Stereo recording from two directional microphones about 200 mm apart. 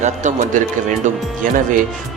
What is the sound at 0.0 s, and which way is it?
Speech, 40° right (ahead or behind).